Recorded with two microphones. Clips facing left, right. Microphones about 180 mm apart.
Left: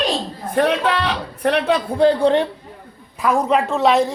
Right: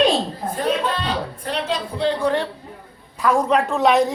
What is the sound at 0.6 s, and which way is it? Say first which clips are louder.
Speech: left 5 dB; 70° left (ahead or behind).